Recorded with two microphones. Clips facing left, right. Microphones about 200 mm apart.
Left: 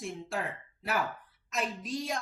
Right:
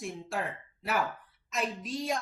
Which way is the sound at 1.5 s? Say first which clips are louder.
Even; centre (ahead or behind).